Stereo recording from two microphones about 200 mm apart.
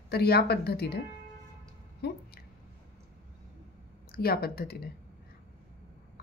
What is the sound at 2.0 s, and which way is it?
Speech, 55° left (ahead or behind).